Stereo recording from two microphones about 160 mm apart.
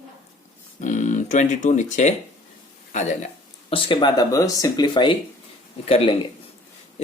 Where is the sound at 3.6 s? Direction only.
35° left (ahead or behind).